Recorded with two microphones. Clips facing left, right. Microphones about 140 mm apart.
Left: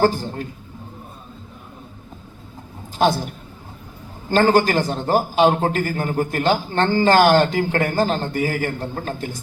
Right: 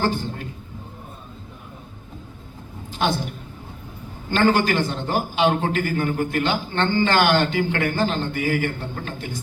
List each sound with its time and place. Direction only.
0.0 s a woman's voice: 40° left (ahead or behind)
3.0 s a man's voice: 40° left (ahead or behind)
4.3 s a man's voice: 40° left (ahead or behind)